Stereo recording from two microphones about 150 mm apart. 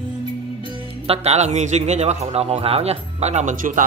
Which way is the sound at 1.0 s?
45° right (ahead or behind).